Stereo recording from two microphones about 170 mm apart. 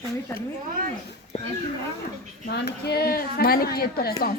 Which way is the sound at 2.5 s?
75° left (ahead or behind).